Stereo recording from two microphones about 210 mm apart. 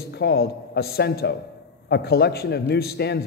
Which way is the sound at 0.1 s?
50° left (ahead or behind).